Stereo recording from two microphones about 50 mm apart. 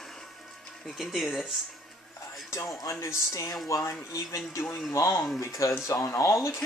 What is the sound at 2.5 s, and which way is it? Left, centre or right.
Speech, left.